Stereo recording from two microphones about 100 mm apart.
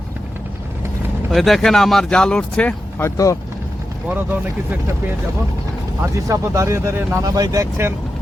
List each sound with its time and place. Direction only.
1.3 s speech: centre (ahead or behind)
3.0 s speech: 35° left (ahead or behind)
4.1 s speech: 20° right (ahead or behind)
6.1 s speech: 35° right (ahead or behind)